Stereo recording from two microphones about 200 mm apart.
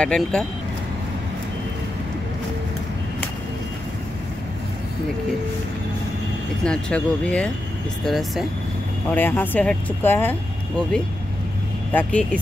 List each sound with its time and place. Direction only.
0.0 s speech: 5° left (ahead or behind)
6.6 s speech: 5° left (ahead or behind)
11.9 s speech: 5° left (ahead or behind)